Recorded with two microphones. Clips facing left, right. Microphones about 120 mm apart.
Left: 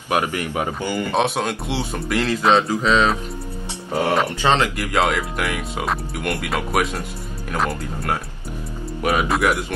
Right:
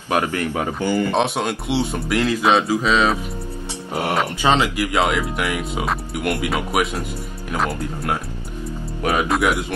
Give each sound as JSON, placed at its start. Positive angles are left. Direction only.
{"t": 0.1, "sound": "speech", "side_deg": 15}
{"t": 1.1, "sound": "speech", "side_deg": 0}
{"t": 3.9, "sound": "speech", "side_deg": -15}